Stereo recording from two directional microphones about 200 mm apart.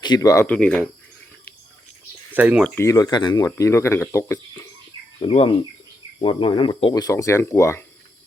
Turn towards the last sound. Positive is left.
turn(degrees=15)  # may be behind; listen again after turning